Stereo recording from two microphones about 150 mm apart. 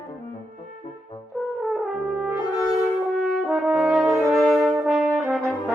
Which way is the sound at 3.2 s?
Centre (ahead or behind).